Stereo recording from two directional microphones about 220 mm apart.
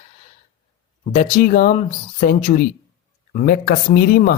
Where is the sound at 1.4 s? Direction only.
40° left (ahead or behind).